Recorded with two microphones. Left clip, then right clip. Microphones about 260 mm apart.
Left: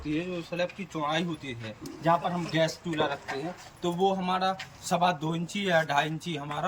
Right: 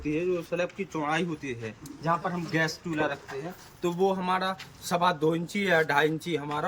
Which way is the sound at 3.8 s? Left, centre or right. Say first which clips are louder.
Even; centre.